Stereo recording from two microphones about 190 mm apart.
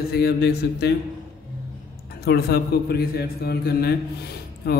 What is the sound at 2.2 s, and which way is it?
Speech, 60° left (ahead or behind).